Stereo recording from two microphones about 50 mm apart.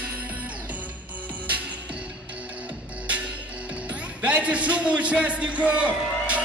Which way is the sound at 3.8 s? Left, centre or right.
Right.